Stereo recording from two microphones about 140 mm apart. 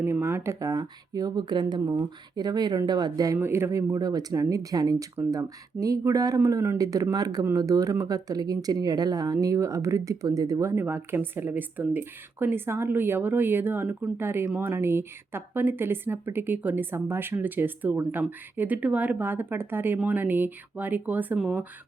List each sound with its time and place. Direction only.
0.0 s speech: 20° right (ahead or behind)
3.3 s speech: 15° right (ahead or behind)